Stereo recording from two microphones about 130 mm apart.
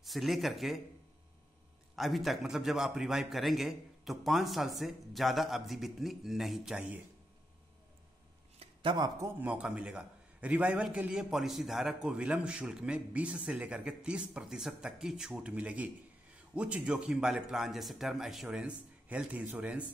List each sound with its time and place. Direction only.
0.0 s a man's voice: centre (ahead or behind)
2.0 s a man's voice: centre (ahead or behind)
8.5 s a sound: 40° right (ahead or behind)
9.4 s a man's voice: 10° right (ahead or behind)